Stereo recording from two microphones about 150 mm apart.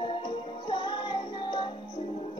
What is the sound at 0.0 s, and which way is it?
Music, 30° left (ahead or behind).